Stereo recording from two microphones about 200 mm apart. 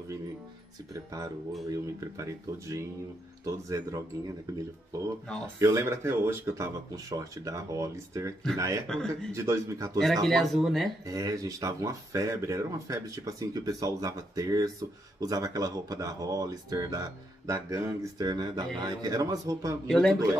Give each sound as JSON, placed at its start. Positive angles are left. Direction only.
{"t": 1.7, "sound": "speech", "side_deg": -15}
{"t": 5.6, "sound": "speech", "side_deg": -15}
{"t": 8.8, "sound": "speech", "side_deg": 5}
{"t": 9.3, "sound": "speech", "side_deg": -15}
{"t": 10.2, "sound": "speech", "side_deg": 0}
{"t": 11.1, "sound": "speech", "side_deg": -15}
{"t": 19.9, "sound": "speech", "side_deg": 5}